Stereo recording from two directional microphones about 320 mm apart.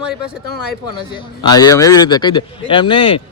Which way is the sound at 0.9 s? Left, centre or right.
Centre.